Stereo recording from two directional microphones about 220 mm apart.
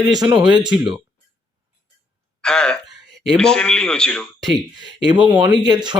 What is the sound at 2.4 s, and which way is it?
Speech, 5° left (ahead or behind).